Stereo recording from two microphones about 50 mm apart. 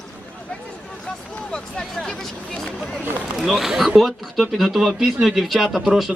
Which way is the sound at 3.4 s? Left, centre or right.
Centre.